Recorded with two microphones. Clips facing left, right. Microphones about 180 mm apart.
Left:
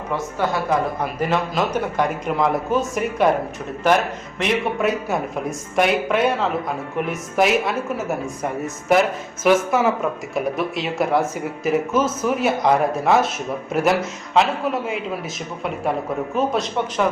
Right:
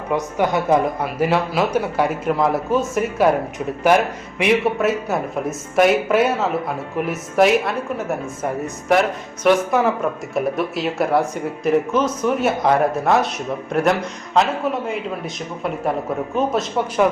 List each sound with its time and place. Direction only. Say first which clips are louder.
0.1 s a woman's voice: right 4 dB; 15° right (ahead or behind); by 14.9 s centre (ahead or behind)
16.3 s a man's voice: right 1 dB; centre (ahead or behind)